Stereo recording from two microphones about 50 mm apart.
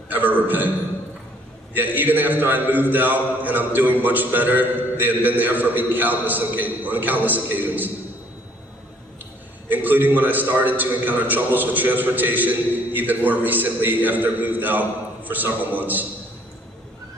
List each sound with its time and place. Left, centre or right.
0.1 s a man's voice: right
1.7 s a man's voice: right
9.6 s a man's voice: right